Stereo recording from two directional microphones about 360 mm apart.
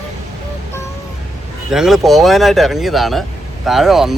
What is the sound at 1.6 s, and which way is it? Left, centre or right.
Speech, centre.